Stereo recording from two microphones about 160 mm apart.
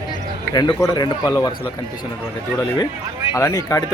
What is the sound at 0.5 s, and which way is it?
A man's voice, 20° left (ahead or behind).